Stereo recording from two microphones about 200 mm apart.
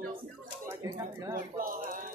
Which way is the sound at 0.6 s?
15° right (ahead or behind).